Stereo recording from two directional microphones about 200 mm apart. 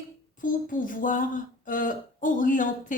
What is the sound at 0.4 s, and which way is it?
Speech, 40° left (ahead or behind).